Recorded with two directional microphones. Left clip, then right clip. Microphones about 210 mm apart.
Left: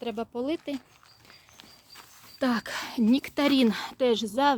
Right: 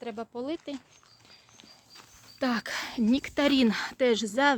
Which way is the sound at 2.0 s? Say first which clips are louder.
Left 2 dB; 5° left (ahead or behind).